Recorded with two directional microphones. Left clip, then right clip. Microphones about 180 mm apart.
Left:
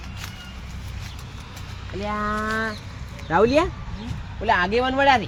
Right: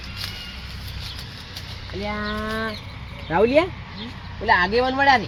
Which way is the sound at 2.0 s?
5° left (ahead or behind).